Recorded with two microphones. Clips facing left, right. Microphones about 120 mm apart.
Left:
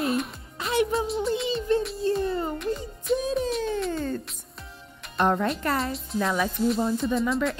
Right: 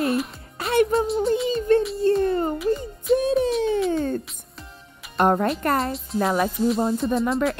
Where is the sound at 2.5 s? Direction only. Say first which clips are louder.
Right 6 dB; centre (ahead or behind).